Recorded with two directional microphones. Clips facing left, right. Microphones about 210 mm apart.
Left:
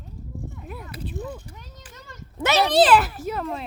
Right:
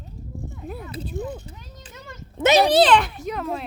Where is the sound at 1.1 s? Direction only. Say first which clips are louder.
Right 4 dB; 20° right (ahead or behind).